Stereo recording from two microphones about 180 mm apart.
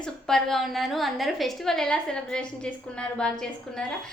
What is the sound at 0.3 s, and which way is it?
A woman's voice, centre (ahead or behind).